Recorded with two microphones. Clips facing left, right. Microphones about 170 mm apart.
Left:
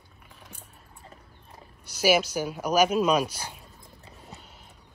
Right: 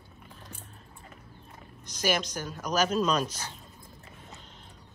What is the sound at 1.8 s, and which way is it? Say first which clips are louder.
Speech: left 6 dB; 10° left (ahead or behind).